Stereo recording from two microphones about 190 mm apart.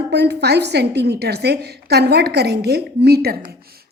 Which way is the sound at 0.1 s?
65° right (ahead or behind).